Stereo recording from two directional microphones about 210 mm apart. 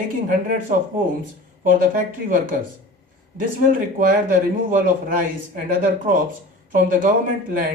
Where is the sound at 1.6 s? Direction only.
40° right (ahead or behind).